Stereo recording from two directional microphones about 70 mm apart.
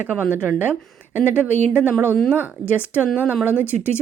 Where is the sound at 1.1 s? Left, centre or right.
Right.